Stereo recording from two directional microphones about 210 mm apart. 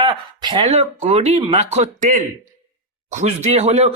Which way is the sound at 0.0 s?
25° right (ahead or behind).